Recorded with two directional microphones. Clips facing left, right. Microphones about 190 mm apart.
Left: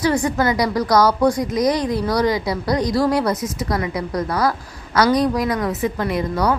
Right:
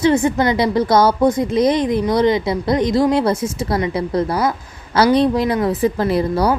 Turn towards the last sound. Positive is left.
turn(degrees=-30)  # may be behind; listen again after turning